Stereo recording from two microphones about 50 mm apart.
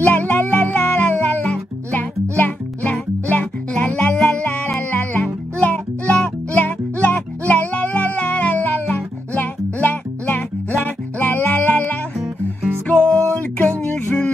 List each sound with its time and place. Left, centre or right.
0.0 s music: left
6.1 s music: centre
6.6 s music: left
12.9 s music: centre
13.6 s music: left